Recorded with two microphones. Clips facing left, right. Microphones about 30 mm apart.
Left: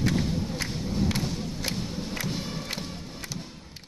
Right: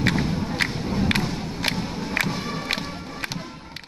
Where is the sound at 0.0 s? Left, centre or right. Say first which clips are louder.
Right 4 dB; right.